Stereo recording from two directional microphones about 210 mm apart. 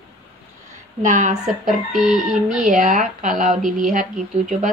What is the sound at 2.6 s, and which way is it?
Speech, 35° right (ahead or behind).